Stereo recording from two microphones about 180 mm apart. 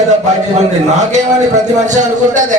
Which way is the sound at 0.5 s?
40° right (ahead or behind).